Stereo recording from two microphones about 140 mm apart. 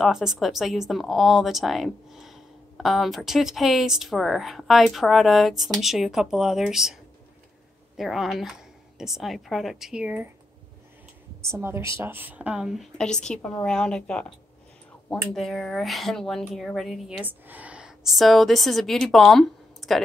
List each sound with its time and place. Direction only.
0.0 s speech: centre (ahead or behind)
8.0 s speech: centre (ahead or behind)
11.4 s speech: 20° right (ahead or behind); by 17.0 s centre (ahead or behind)
17.2 s a woman's voice: 10° right (ahead or behind)